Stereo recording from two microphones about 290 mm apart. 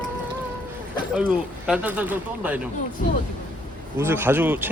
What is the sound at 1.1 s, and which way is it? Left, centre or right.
Speech, centre.